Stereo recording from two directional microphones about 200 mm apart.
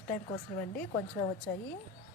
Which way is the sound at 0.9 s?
25° left (ahead or behind).